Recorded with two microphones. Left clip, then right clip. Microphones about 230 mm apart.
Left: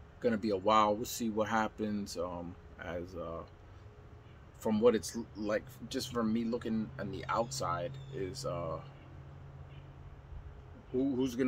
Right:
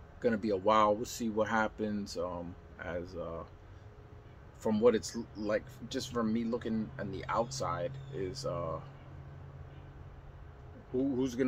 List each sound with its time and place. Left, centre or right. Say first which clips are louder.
0.2 s speech: right 1 dB; centre
4.6 s speech: right 1 dB; centre
11.0 s speech: right 1 dB; centre